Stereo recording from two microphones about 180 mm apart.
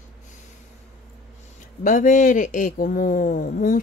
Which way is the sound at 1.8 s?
45° left (ahead or behind).